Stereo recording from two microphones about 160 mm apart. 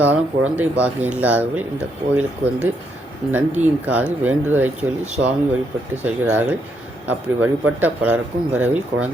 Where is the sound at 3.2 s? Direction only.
5° right (ahead or behind).